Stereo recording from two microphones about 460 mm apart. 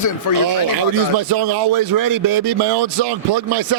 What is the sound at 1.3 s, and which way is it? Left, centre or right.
Speech, right.